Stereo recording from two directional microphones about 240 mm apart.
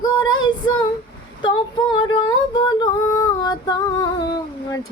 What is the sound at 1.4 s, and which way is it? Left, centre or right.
Female singing, centre.